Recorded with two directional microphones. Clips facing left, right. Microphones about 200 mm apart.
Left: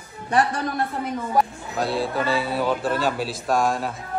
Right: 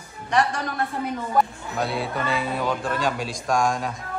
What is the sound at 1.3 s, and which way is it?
Speech, centre (ahead or behind).